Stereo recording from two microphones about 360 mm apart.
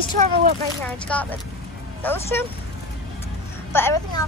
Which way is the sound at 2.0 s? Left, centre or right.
Centre.